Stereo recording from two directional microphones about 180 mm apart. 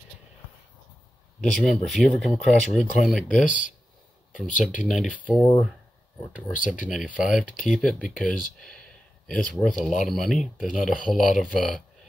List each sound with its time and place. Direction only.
1.4 s speech: centre (ahead or behind)
3.4 s speech: 45° left (ahead or behind)
4.6 s speech: 5° right (ahead or behind)
6.6 s speech: 5° right (ahead or behind)